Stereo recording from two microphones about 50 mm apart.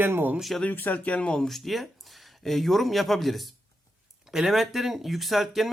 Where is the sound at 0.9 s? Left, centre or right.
Left.